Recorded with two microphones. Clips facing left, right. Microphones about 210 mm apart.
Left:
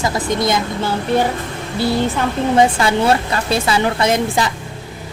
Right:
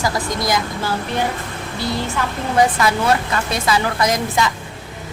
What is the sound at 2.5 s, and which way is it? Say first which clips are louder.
A woman's voice: left 1 dB; 30° left (ahead or behind).